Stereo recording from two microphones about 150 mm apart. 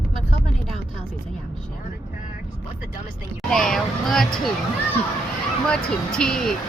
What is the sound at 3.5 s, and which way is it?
Speech, 5° left (ahead or behind).